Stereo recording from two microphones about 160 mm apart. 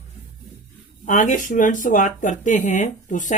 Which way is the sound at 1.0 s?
55° left (ahead or behind).